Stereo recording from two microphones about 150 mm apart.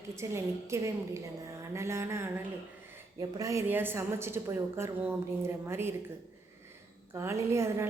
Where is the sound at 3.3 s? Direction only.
20° right (ahead or behind).